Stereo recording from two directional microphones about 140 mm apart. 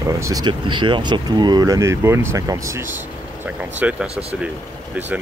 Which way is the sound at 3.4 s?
10° right (ahead or behind).